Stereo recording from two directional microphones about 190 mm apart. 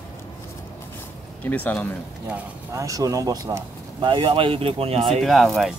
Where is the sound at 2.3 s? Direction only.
15° right (ahead or behind); by 5.2 s 30° right (ahead or behind).